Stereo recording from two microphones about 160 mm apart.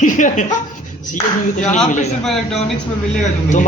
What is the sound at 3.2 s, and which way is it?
Speech, 50° left (ahead or behind).